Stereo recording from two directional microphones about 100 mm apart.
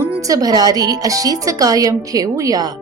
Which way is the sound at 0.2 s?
35° right (ahead or behind).